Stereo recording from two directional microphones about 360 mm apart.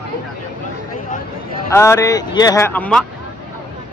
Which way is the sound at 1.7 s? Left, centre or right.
Centre.